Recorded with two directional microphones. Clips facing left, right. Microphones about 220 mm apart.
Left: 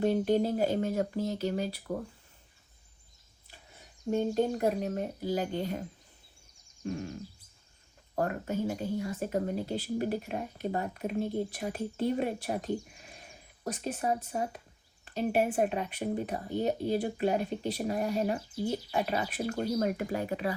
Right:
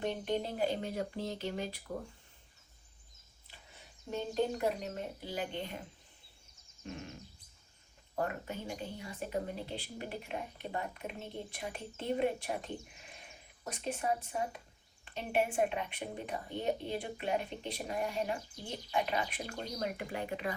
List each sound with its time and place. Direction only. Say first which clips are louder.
0.0 s speech: left 9 dB; 40° left (ahead or behind)
4.1 s speech: left 6 dB; 50° left (ahead or behind)
6.8 s speech: left 9 dB; 35° left (ahead or behind)
8.1 s speech: left 6 dB; 45° left (ahead or behind)
18.3 s speech: left 11 dB; 5° left (ahead or behind)
18.9 s speech: left 3 dB; 40° left (ahead or behind)